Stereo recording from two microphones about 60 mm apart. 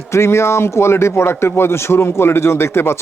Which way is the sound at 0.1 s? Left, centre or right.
Left.